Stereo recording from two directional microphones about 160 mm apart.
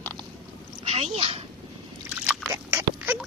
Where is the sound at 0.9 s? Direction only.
40° right (ahead or behind).